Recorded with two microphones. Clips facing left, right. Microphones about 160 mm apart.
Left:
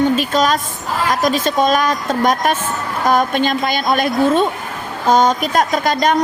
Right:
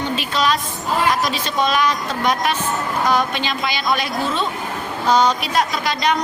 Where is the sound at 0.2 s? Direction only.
45° left (ahead or behind).